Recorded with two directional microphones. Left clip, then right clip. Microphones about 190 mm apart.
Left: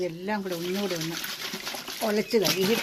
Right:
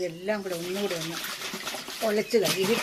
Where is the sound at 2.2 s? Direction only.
60° left (ahead or behind).